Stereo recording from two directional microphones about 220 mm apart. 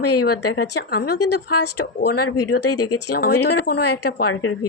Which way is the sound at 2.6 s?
90° left.